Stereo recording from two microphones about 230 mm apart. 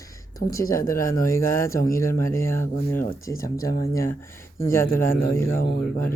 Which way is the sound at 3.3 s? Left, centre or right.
Left.